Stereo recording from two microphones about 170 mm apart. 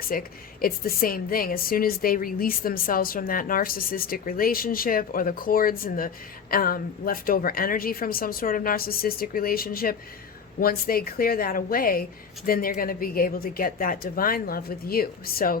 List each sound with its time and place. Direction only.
0.0 s a woman's voice: 60° left (ahead or behind)